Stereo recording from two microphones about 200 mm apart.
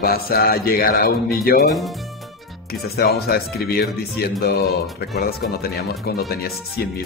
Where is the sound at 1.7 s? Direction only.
Centre (ahead or behind).